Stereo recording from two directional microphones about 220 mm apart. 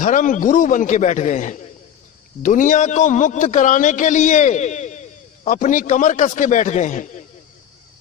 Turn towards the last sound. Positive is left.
turn(degrees=35)  # may be behind; listen again after turning